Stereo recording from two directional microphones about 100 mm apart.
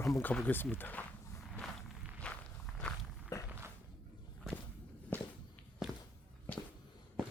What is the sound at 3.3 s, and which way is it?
Walk, 35° left (ahead or behind).